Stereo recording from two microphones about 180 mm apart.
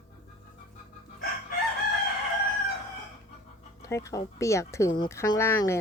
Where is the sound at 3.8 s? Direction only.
15° left (ahead or behind).